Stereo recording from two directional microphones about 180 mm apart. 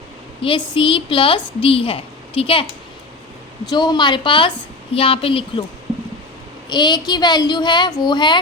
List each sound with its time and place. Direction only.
0.4 s a woman's voice: 30° left (ahead or behind)
3.7 s child singing: 25° left (ahead or behind)
4.9 s a woman's voice: 30° left (ahead or behind)
6.7 s child singing: 25° left (ahead or behind)